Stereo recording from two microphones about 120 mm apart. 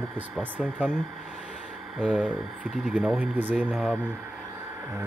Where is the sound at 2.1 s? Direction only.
10° right (ahead or behind).